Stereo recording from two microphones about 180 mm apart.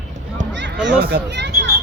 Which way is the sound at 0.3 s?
80° right.